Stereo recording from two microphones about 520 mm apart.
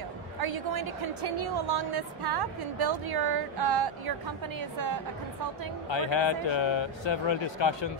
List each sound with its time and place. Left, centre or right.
0.4 s a woman's voice: right
5.9 s speech: left